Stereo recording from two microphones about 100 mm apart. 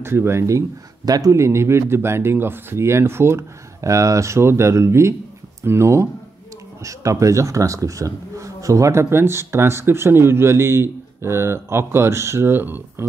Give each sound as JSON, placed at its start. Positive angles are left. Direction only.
{"t": 0.0, "sound": "speech", "side_deg": -25}